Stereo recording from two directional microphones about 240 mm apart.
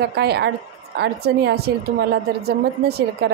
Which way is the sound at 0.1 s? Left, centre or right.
Right.